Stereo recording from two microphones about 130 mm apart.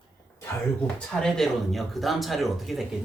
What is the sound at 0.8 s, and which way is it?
Speech, 5° left (ahead or behind).